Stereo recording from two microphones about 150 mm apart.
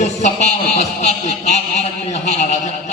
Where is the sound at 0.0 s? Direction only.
50° left (ahead or behind).